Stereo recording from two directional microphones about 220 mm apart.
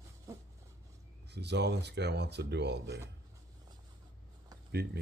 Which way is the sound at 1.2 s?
50° right (ahead or behind).